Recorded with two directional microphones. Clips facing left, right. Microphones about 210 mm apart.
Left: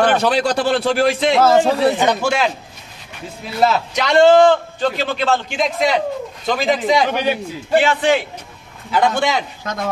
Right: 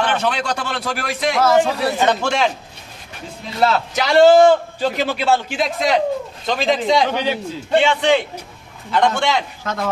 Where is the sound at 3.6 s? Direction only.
5° right (ahead or behind).